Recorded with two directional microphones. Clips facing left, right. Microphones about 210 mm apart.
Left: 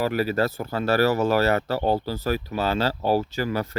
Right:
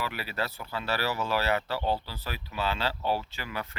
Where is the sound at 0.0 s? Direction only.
45° left (ahead or behind).